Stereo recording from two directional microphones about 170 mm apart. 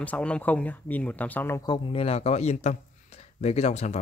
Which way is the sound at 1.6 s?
35° left (ahead or behind).